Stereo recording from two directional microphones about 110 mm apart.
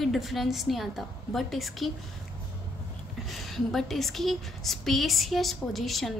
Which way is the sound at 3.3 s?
Centre (ahead or behind).